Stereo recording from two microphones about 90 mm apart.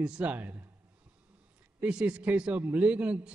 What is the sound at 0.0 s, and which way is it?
Speech, 15° right (ahead or behind).